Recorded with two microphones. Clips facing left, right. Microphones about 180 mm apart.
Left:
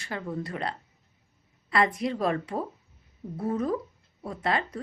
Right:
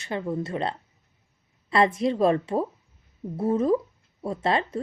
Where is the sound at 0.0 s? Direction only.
20° right (ahead or behind).